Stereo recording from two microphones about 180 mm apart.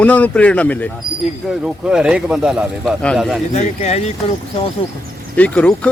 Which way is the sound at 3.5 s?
40° left (ahead or behind).